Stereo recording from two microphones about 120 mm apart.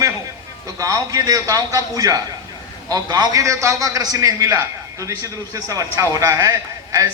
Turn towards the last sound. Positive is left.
turn(degrees=-25)  # may be behind; listen again after turning